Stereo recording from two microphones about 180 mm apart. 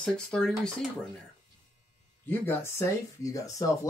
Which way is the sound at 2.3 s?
15° left (ahead or behind).